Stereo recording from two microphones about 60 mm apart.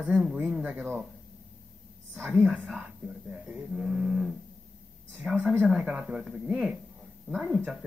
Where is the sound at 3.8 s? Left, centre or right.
Centre.